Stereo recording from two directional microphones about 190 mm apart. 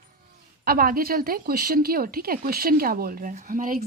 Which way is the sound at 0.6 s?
50° right (ahead or behind).